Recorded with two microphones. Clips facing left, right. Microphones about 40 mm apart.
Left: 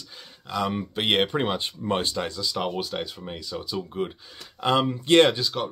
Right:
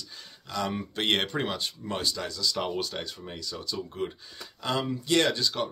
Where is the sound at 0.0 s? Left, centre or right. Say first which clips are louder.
Left 2 dB; centre; by 2.4 s left.